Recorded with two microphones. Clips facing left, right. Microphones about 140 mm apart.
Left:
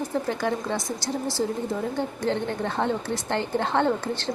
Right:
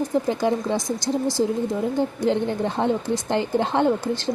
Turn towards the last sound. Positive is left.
turn(degrees=-15)  # may be behind; listen again after turning